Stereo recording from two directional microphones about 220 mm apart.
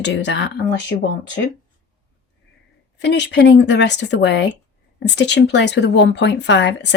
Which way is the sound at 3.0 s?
50° left (ahead or behind).